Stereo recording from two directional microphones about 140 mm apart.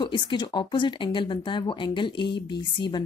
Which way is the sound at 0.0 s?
35° left (ahead or behind).